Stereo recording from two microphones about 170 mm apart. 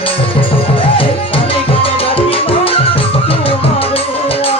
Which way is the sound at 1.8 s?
35° left (ahead or behind).